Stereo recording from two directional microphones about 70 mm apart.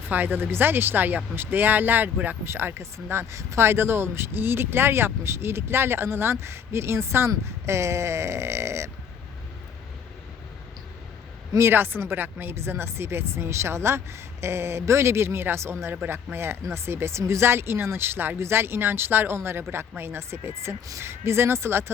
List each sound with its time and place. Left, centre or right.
0.1 s speech: right
11.5 s speech: right